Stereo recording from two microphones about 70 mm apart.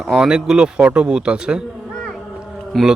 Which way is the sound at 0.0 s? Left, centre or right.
Centre.